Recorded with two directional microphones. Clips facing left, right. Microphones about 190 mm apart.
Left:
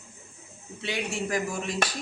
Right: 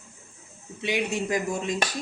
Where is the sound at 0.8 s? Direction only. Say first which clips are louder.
Right 4 dB; 15° right (ahead or behind).